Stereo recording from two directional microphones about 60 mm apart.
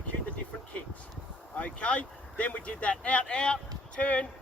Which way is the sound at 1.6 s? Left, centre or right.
Left.